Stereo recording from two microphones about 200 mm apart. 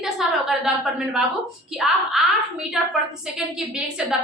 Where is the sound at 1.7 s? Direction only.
Centre (ahead or behind).